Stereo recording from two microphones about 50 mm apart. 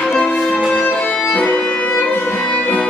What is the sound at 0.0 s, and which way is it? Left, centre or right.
Music, centre.